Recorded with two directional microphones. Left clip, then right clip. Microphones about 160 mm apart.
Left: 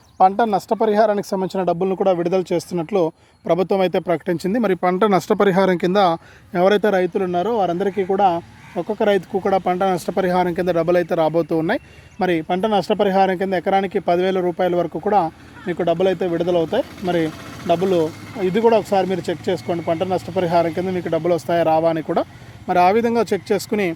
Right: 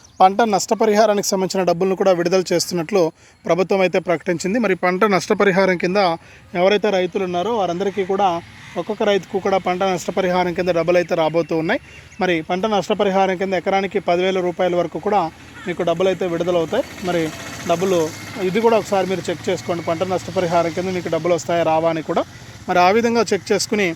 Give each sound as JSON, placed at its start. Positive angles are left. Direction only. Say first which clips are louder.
{"t": 0.2, "sound": "speech", "louder": "right 1 dB", "side_deg": 5}
{"t": 3.4, "sound": "speech", "louder": "right 1 dB", "side_deg": 15}
{"t": 22.6, "sound": "speech", "louder": "right 1 dB", "side_deg": 15}